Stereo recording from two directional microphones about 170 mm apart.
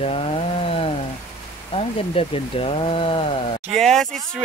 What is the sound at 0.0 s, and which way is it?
Chainsaw, 35° left (ahead or behind).